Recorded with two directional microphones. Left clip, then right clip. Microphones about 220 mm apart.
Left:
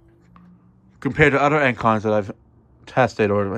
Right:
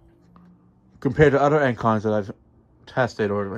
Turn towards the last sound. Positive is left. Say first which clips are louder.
# left 5 dB
turn(degrees=-5)  # may be behind; listen again after turning